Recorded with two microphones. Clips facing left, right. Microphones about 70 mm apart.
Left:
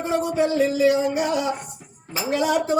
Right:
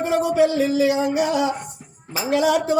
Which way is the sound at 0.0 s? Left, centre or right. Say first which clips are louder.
Right 4 dB; right.